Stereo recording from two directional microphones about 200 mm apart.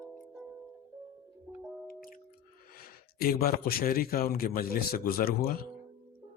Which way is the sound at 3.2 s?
50° left (ahead or behind).